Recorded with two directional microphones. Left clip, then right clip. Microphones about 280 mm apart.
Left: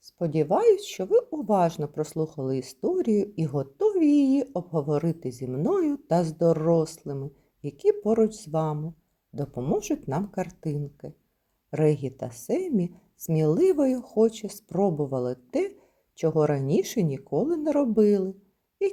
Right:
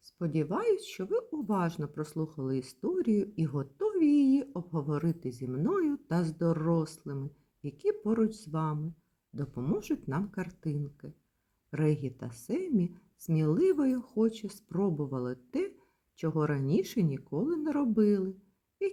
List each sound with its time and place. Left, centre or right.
0.0 s speech: centre